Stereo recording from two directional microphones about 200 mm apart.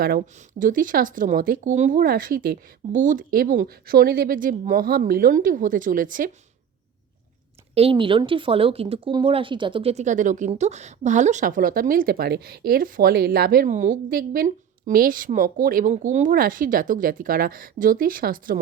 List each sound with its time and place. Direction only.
0.0 s speech: 45° right (ahead or behind)
7.8 s speech: 25° right (ahead or behind); by 18.6 s 45° right (ahead or behind)